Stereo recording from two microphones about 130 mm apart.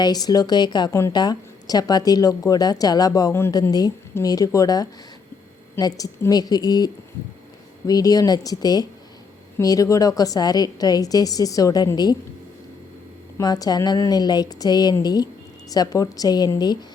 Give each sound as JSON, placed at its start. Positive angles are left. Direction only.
{"t": 0.0, "sound": "a woman's voice", "side_deg": 30}
{"t": 13.4, "sound": "a woman's voice", "side_deg": 30}